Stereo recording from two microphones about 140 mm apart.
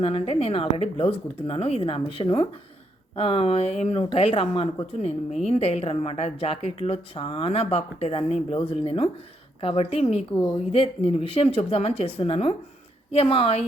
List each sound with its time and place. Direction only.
0.0 s speech: 45° left (ahead or behind)